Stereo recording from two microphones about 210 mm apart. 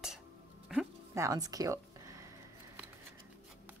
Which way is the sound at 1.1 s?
15° right (ahead or behind).